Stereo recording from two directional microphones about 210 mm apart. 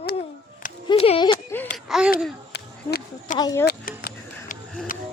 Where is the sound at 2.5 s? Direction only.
55° left (ahead or behind).